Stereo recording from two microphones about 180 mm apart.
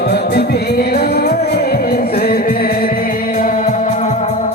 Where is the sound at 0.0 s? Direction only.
65° left (ahead or behind); by 4.5 s 40° left (ahead or behind).